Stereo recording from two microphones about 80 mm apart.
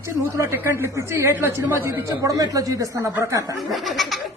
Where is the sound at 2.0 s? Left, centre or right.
Right.